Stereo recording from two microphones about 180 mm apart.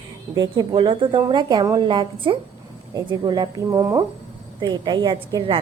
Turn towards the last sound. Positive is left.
turn(degrees=-30)  # may be behind; listen again after turning